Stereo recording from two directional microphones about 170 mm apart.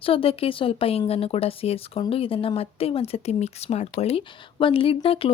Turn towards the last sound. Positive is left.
turn(degrees=30)  # may be behind; listen again after turning